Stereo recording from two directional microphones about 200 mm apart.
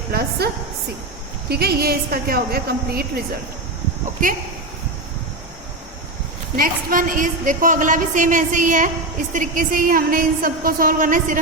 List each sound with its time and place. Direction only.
0.1 s a woman's voice: 55° right (ahead or behind)
6.6 s a woman's voice: 40° right (ahead or behind)